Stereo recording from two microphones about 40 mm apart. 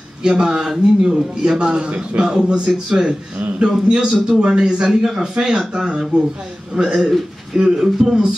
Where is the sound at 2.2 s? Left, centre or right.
Centre.